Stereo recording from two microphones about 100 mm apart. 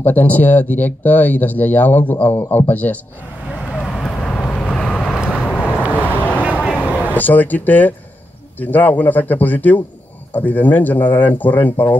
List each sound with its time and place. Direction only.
0.0 s speech: 20° left (ahead or behind)
3.8 s vehicle: 5° left (ahead or behind)
6.7 s a sound: 15° left (ahead or behind)
7.2 s speech: 15° left (ahead or behind)